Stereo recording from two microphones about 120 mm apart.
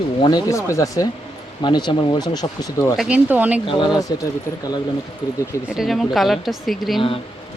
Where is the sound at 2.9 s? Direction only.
10° right (ahead or behind).